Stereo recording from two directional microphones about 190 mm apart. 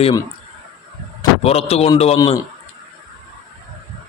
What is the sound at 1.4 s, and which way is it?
Speech, 30° left (ahead or behind).